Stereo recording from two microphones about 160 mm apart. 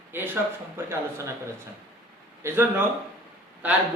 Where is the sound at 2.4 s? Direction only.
15° right (ahead or behind).